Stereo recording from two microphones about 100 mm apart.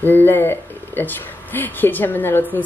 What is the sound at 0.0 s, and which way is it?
Speech, 20° left (ahead or behind).